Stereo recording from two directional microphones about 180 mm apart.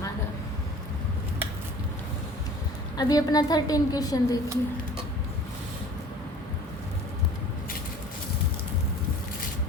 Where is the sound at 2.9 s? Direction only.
20° left (ahead or behind).